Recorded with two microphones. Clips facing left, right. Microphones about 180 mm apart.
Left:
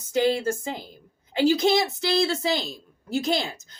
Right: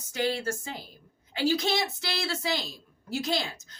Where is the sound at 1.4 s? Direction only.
25° left (ahead or behind).